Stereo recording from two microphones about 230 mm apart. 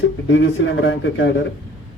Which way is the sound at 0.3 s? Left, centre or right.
Left.